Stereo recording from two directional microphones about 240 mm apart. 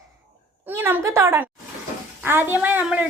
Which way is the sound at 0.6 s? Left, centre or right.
Centre.